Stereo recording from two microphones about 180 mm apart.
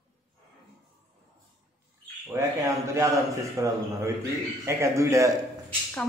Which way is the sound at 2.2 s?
15° right (ahead or behind).